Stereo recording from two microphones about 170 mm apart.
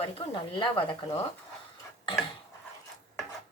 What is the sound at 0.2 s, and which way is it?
Speech, 30° left (ahead or behind).